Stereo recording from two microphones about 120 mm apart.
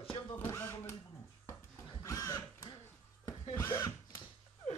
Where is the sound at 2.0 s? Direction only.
30° left (ahead or behind).